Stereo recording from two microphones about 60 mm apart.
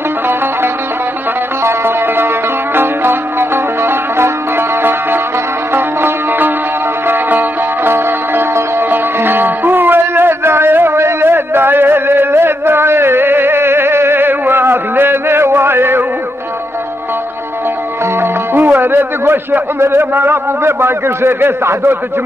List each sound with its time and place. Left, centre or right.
1.6 s music: right
7.9 s music: right
18.2 s a man's voice: right